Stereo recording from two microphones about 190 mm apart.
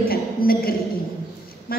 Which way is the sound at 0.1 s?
50° left (ahead or behind).